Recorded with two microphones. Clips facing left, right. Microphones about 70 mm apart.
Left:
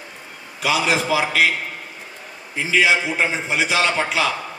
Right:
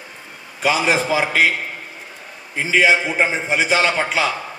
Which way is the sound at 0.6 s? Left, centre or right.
Right.